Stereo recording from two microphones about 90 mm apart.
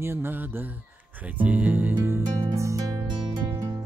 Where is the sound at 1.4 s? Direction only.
20° right (ahead or behind).